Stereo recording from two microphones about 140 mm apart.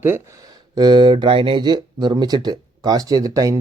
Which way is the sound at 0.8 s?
30° right (ahead or behind).